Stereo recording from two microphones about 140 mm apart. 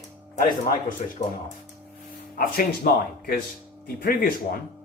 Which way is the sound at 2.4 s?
90° left.